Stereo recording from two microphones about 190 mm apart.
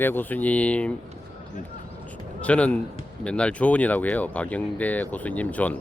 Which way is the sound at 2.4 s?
5° left (ahead or behind).